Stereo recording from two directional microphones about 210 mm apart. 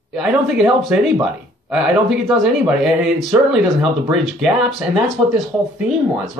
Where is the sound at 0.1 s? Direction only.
5° right (ahead or behind).